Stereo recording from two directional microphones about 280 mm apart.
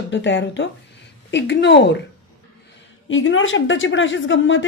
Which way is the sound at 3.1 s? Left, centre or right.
Left.